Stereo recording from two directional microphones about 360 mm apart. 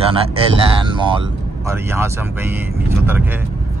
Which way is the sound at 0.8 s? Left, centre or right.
Centre.